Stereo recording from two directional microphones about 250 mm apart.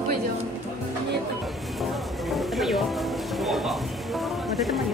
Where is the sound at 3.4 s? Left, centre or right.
Centre.